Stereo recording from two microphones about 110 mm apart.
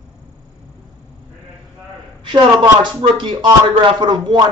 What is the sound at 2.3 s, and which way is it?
Speech, 45° right (ahead or behind).